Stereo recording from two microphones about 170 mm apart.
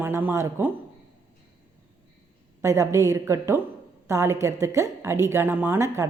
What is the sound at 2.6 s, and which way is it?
Speech, 15° right (ahead or behind).